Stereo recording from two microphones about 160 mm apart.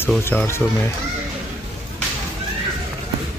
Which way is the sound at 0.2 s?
15° left (ahead or behind).